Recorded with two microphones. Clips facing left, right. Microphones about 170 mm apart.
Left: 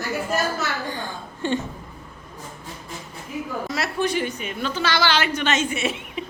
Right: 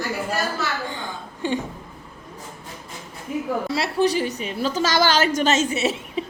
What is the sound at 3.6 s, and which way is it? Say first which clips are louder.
A woman's voice: right 3 dB; 30° right (ahead or behind).